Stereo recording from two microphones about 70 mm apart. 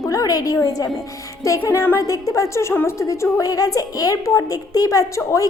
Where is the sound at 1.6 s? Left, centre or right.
Left.